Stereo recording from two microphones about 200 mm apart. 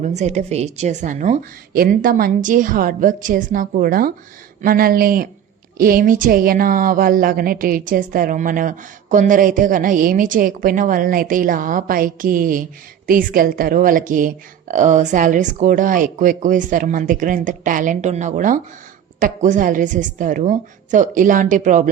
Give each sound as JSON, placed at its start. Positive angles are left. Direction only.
{"t": 0.0, "sound": "a woman's voice", "side_deg": -35}